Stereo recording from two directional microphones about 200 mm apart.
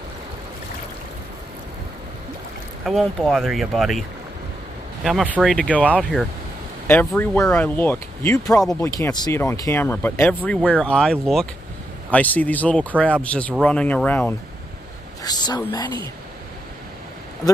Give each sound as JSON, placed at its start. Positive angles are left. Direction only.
{"t": 2.8, "sound": "speech", "side_deg": 0}
{"t": 5.0, "sound": "speech", "side_deg": -5}
{"t": 7.1, "sound": "speech", "side_deg": 5}
{"t": 15.2, "sound": "speech", "side_deg": 20}